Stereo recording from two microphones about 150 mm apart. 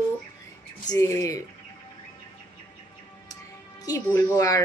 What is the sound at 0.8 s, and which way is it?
Speech, 20° left (ahead or behind).